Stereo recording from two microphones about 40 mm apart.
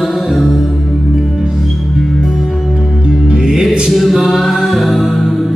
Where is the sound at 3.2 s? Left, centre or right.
Centre.